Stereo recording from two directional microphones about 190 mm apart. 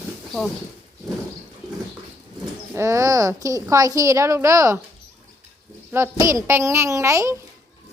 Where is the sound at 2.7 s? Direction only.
15° right (ahead or behind).